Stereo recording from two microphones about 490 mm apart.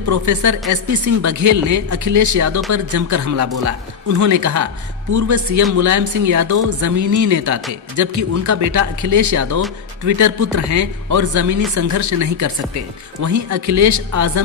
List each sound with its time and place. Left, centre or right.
0.0 s a woman's voice: right